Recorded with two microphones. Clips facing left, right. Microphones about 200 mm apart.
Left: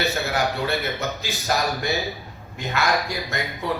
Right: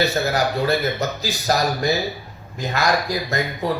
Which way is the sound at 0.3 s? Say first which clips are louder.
Right 4 dB; 35° right (ahead or behind).